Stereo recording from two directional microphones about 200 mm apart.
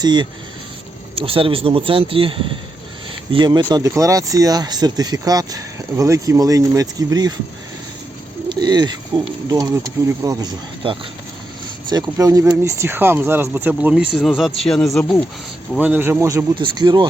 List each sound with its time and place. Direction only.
0.0 s speech: 20° right (ahead or behind)
3.3 s speech: 25° right (ahead or behind)
8.4 s speech: 20° right (ahead or behind); by 15.2 s centre (ahead or behind)
15.7 s speech: 10° right (ahead or behind)